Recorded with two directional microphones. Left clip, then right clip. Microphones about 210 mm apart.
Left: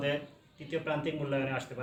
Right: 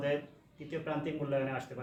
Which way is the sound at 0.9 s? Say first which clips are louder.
Left 1 dB; 20° right (ahead or behind).